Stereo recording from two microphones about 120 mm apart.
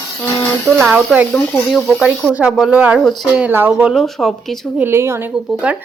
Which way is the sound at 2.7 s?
10° right (ahead or behind).